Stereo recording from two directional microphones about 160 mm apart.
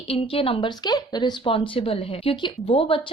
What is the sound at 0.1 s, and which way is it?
Speech, 35° left (ahead or behind).